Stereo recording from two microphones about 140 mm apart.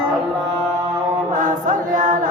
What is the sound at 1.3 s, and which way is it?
Chant, 70° right (ahead or behind).